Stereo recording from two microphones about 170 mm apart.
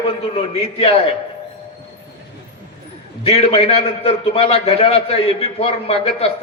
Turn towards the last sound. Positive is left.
turn(degrees=35)  # may be behind; listen again after turning